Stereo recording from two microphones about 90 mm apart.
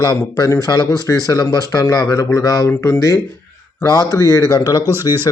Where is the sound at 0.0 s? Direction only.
45° left (ahead or behind).